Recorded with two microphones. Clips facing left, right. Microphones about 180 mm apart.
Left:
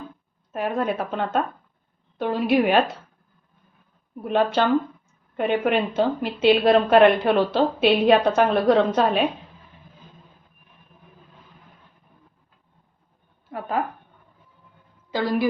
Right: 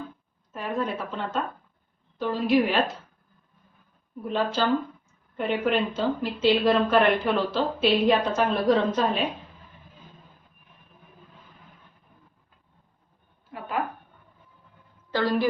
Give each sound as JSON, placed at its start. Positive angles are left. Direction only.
{"t": 0.5, "sound": "a woman's voice", "side_deg": 60}
{"t": 4.2, "sound": "a woman's voice", "side_deg": 65}
{"t": 13.5, "sound": "a sound", "side_deg": 55}
{"t": 15.1, "sound": "a woman's voice", "side_deg": 10}